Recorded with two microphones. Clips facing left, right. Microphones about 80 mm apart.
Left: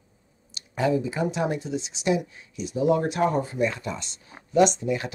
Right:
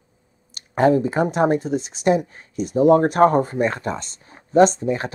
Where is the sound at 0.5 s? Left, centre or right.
Right.